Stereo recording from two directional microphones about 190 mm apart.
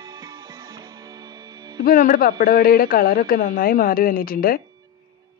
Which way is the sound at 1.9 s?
45° left (ahead or behind).